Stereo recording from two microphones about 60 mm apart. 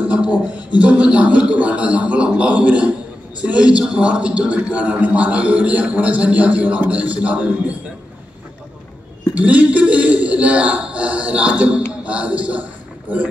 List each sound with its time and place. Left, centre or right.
0.0 s a sound: right
3.3 s a man's voice: right
9.3 s a man's voice: right